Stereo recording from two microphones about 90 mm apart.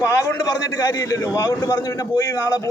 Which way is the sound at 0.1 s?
35° left (ahead or behind).